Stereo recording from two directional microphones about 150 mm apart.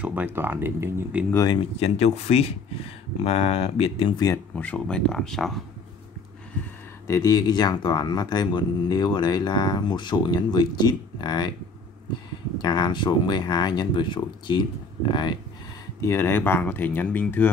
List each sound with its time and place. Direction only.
0.0 s speech: 10° right (ahead or behind)
1.3 s speech: 20° left (ahead or behind)
1.8 s speech: 45° left (ahead or behind)
4.6 s speech: 10° left (ahead or behind)
7.1 s speech: 25° left (ahead or behind)
12.5 s speech: 30° left (ahead or behind)
16.0 s speech: 20° left (ahead or behind)